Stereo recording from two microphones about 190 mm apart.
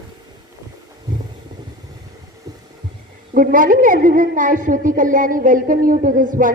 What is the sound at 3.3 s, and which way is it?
A woman's voice, 45° right (ahead or behind).